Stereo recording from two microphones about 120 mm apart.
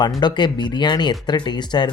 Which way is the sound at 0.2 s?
40° left (ahead or behind).